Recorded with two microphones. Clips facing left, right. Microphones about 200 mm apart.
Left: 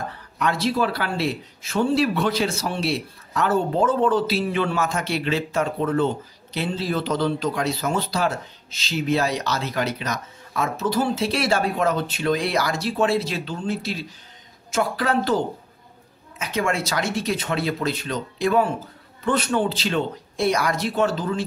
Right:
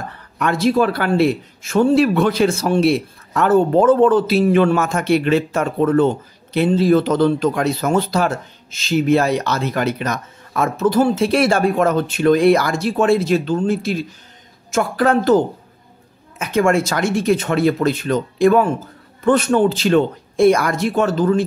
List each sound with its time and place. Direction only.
0.4 s speech: 50° right (ahead or behind)